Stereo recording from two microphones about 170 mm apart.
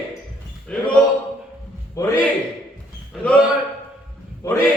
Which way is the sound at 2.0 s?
20° left (ahead or behind).